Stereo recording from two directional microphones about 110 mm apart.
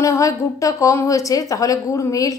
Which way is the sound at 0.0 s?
30° left (ahead or behind).